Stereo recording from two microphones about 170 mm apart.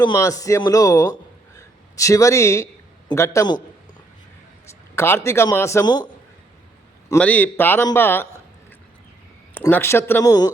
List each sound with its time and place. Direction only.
0.0 s a man's voice: 20° left (ahead or behind)
4.9 s a man's voice: 15° left (ahead or behind)
7.2 s a man's voice: 10° left (ahead or behind)
9.6 s a man's voice: 10° left (ahead or behind)